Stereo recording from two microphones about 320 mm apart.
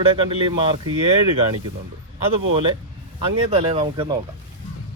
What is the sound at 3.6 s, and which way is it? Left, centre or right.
Speech, centre.